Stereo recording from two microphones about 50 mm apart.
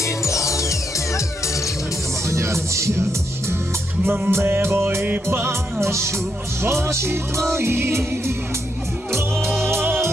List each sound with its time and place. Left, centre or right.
0.0 s music: left
2.3 s music: right
4.0 s music: right
5.8 s music: right